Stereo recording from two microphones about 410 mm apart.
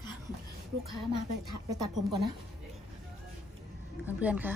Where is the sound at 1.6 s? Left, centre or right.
Right.